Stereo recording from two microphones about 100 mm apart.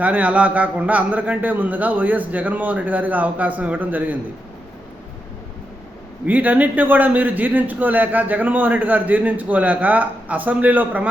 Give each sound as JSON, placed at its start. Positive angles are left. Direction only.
{"t": 0.0, "sound": "a man's voice", "side_deg": -15}
{"t": 6.2, "sound": "a man's voice", "side_deg": -15}